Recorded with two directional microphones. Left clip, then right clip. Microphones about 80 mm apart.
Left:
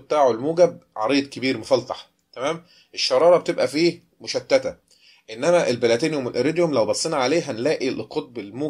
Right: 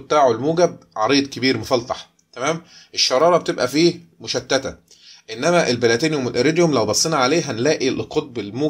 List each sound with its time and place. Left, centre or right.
0.1 s speech: centre
3.2 s speech: centre
5.2 s speech: right